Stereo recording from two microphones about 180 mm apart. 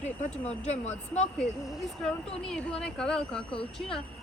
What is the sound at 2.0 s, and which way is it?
Speech, 5° left (ahead or behind).